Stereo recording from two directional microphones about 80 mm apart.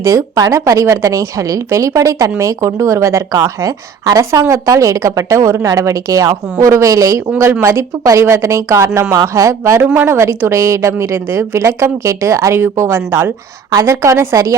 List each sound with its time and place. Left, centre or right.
0.0 s speech: right